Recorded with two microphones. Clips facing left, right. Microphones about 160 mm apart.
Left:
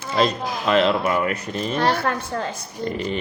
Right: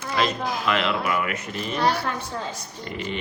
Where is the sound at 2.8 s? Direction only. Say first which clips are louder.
Left 6 dB; 40° left (ahead or behind).